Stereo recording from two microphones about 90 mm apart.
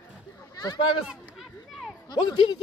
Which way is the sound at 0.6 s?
50° left (ahead or behind).